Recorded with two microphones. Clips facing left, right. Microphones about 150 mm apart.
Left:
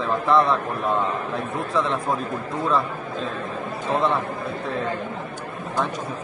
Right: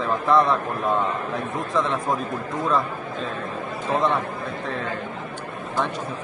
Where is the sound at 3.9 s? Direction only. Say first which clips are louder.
Even; centre (ahead or behind).